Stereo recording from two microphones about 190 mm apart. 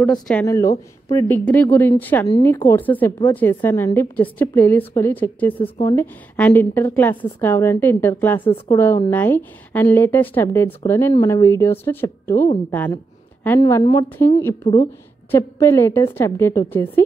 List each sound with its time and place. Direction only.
0.0 s a woman's voice: 5° left (ahead or behind)
0.5 s a woman's voice: 15° left (ahead or behind)
12.7 s a sound: 10° left (ahead or behind)
13.6 s a woman's voice: 20° left (ahead or behind)